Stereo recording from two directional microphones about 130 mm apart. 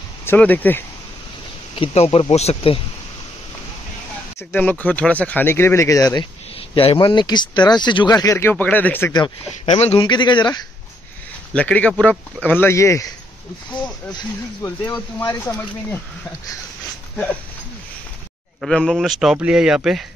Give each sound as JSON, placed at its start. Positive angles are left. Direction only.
{"t": 0.2, "sound": "speech", "side_deg": 15}
{"t": 1.8, "sound": "speech", "side_deg": 45}
{"t": 4.4, "sound": "speech", "side_deg": 15}
{"t": 6.7, "sound": "speech", "side_deg": 45}
{"t": 9.7, "sound": "speech", "side_deg": 50}
{"t": 10.0, "sound": "speech", "side_deg": 35}
{"t": 11.5, "sound": "speech", "side_deg": 10}
{"t": 14.9, "sound": "speech", "side_deg": 15}
{"t": 18.6, "sound": "speech", "side_deg": 5}